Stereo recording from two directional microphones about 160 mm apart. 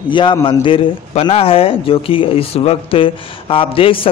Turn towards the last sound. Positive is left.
turn(degrees=35)  # may be behind; listen again after turning